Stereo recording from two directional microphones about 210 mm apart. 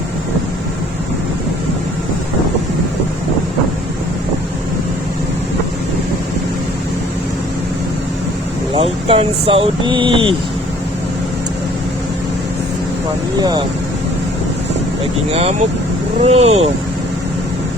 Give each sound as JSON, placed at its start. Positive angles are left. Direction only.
{"t": 8.7, "sound": "speech", "side_deg": -25}
{"t": 15.3, "sound": "speech", "side_deg": -30}